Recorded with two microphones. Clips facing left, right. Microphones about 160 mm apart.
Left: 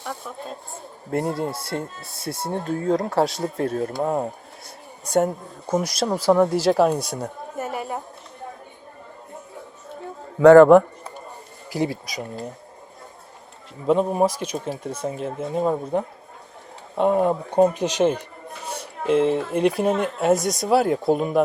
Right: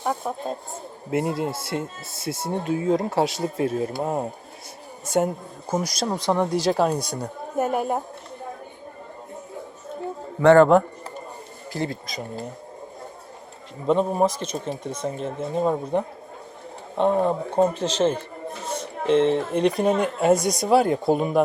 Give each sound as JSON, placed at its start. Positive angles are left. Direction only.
{"t": 0.0, "sound": "speech", "side_deg": -50}
{"t": 1.1, "sound": "speech", "side_deg": 0}
{"t": 7.6, "sound": "speech", "side_deg": -50}
{"t": 10.4, "sound": "speech", "side_deg": 10}
{"t": 13.8, "sound": "speech", "side_deg": 5}